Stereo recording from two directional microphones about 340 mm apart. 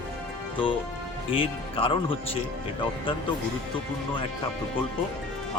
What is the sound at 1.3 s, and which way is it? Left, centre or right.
Speech, centre.